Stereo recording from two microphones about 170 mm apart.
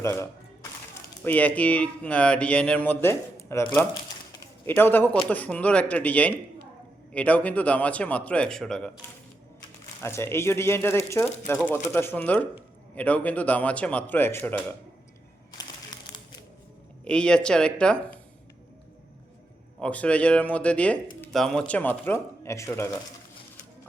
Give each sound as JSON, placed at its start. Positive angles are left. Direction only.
{"t": 0.0, "sound": "music", "side_deg": 15}
{"t": 1.2, "sound": "speech", "side_deg": 10}
{"t": 10.0, "sound": "speech", "side_deg": 15}
{"t": 17.1, "sound": "speech", "side_deg": 5}
{"t": 19.8, "sound": "speech", "side_deg": 5}